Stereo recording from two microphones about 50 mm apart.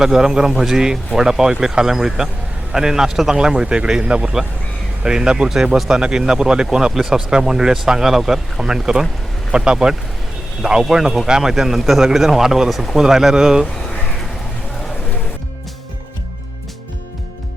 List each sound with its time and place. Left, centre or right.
0.0 s speech: centre